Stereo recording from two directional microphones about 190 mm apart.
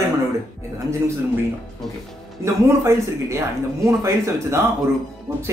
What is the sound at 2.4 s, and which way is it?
Speech, 15° right (ahead or behind).